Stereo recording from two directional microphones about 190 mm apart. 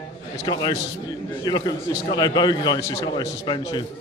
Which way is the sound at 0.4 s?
20° left (ahead or behind).